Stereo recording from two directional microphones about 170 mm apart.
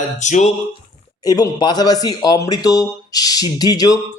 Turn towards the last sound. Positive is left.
turn(degrees=20)  # may be behind; listen again after turning